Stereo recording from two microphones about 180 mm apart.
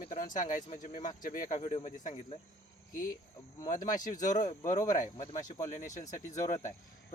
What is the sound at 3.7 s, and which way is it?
Speech, 45° left (ahead or behind).